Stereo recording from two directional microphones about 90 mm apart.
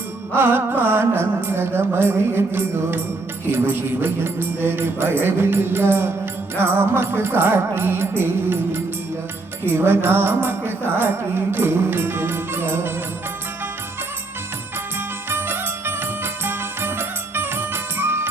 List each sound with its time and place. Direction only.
0.3 s music: 25° right (ahead or behind)
15.3 s music: 25° right (ahead or behind)